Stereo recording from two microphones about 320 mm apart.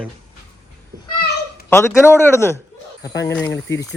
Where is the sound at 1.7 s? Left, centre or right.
Centre.